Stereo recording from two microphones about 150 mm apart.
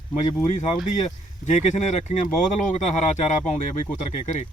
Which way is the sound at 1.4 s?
50° left (ahead or behind).